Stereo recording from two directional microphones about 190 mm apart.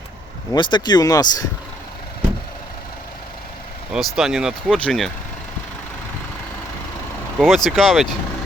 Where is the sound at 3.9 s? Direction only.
Centre (ahead or behind).